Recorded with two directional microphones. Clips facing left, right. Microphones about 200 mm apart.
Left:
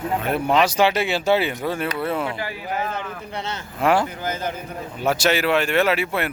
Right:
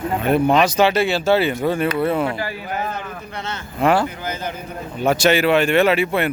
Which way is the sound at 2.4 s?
15° left (ahead or behind).